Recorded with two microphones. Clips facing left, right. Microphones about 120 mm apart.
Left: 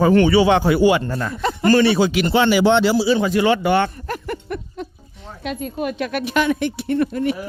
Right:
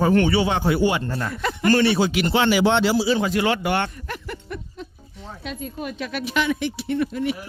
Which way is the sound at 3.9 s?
40° left (ahead or behind).